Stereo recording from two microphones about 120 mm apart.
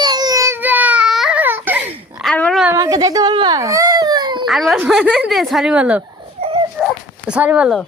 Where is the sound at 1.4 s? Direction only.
15° right (ahead or behind).